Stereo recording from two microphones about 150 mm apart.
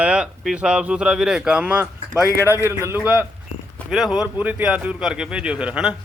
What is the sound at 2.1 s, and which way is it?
Speech, 20° left (ahead or behind).